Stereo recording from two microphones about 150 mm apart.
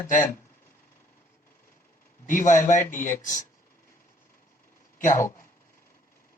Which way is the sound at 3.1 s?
55° left (ahead or behind).